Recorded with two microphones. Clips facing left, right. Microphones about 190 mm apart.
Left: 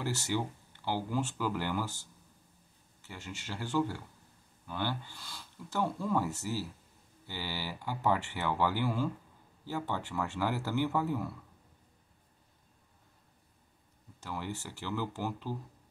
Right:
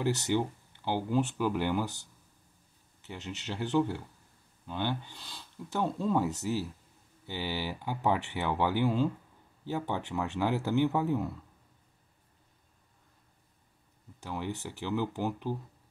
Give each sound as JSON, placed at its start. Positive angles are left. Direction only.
{"t": 0.0, "sound": "speech", "side_deg": -20}
{"t": 14.2, "sound": "speech", "side_deg": -15}